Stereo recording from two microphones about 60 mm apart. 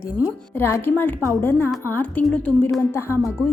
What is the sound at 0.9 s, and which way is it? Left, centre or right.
A woman's voice, left.